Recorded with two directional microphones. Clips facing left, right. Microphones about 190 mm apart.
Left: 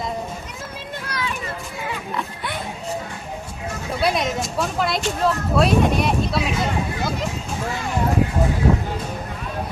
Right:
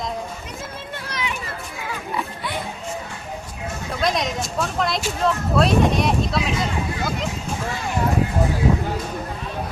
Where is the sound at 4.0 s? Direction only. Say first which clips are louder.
Left 1 dB; 5° left (ahead or behind).